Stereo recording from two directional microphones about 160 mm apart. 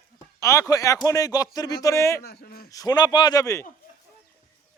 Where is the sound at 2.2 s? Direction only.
85° left.